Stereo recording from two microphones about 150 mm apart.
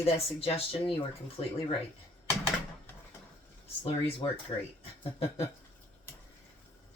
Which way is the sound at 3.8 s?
35° left (ahead or behind).